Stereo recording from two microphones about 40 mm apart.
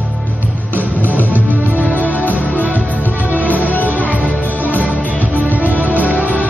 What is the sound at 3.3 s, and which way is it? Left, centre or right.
Music, right.